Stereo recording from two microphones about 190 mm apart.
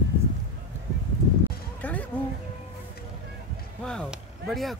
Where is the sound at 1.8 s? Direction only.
10° left (ahead or behind).